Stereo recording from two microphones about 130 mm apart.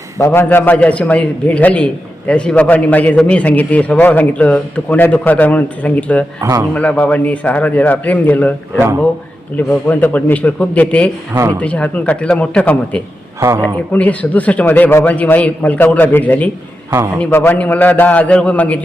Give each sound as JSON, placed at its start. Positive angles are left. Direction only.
{"t": 0.2, "sound": "a man's voice", "side_deg": 20}
{"t": 6.4, "sound": "speech", "side_deg": -25}
{"t": 6.7, "sound": "a man's voice", "side_deg": 10}